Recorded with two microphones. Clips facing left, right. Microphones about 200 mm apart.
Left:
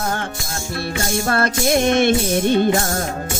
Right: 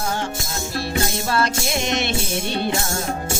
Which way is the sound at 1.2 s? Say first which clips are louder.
Left 3 dB; 55° left (ahead or behind).